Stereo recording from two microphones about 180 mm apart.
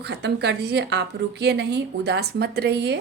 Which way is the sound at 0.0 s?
65° right (ahead or behind).